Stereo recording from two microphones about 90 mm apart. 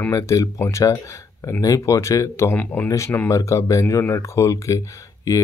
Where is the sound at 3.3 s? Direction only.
35° left (ahead or behind).